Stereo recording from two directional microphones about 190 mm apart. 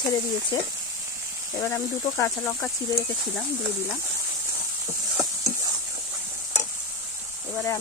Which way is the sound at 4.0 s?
15° right (ahead or behind).